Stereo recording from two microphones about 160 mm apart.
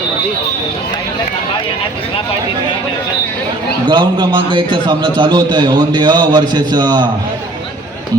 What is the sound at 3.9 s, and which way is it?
A man's voice, 30° right (ahead or behind).